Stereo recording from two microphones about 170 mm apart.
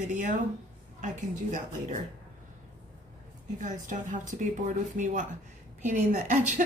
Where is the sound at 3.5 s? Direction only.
50° right (ahead or behind).